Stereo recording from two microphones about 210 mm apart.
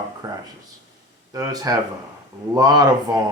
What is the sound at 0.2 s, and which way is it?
Speech, 15° right (ahead or behind).